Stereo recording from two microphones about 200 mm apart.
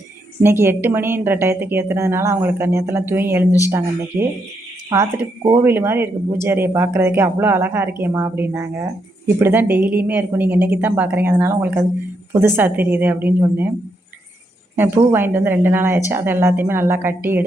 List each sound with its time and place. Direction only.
0.4 s speech: 10° right (ahead or behind)
14.8 s speech: 10° right (ahead or behind)